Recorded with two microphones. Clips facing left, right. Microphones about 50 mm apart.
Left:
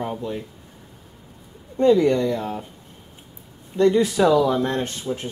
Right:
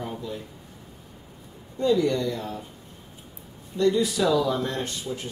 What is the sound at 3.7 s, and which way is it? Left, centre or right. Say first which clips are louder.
Speech: left 5 dB; left.